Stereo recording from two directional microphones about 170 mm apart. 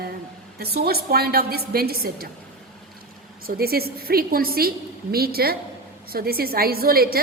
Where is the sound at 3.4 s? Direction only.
65° right (ahead or behind).